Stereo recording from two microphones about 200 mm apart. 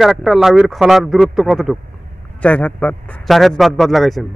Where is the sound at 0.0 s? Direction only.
Centre (ahead or behind).